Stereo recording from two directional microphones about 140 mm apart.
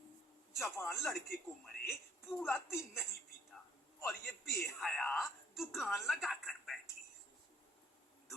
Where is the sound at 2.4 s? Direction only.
5° right (ahead or behind).